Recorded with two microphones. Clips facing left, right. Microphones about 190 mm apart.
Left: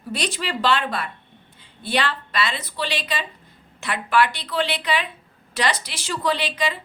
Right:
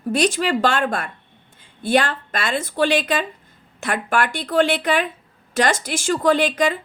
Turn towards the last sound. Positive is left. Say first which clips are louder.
# right 7 dB
turn(degrees=-50)  # may be behind; listen again after turning